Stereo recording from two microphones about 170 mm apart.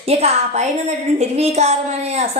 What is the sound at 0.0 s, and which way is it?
A woman's voice, 35° right (ahead or behind).